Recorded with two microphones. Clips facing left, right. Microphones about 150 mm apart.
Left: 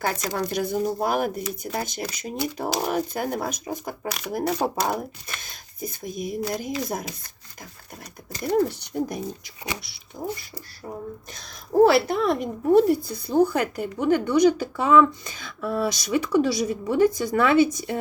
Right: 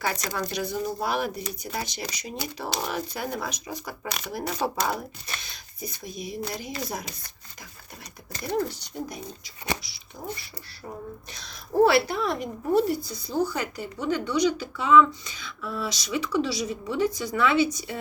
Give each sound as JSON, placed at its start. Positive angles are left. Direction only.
{"t": 0.0, "sound": "speech", "side_deg": 50}
{"t": 8.6, "sound": "speech", "side_deg": 55}
{"t": 11.3, "sound": "speech", "side_deg": 50}